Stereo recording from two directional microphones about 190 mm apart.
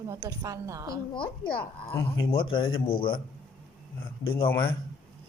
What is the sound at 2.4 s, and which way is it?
Speech, 25° left (ahead or behind).